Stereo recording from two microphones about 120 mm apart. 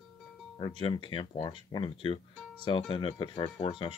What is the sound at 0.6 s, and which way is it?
Speech, 40° left (ahead or behind).